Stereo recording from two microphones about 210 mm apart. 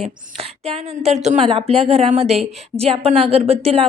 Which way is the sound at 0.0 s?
30° right (ahead or behind).